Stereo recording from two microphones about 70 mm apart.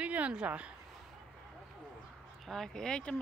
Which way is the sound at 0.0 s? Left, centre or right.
Centre.